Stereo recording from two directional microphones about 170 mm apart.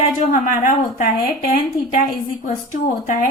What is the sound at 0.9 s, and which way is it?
Speech, 55° left (ahead or behind).